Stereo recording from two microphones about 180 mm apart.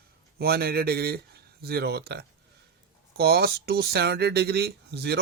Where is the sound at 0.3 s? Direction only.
60° right (ahead or behind).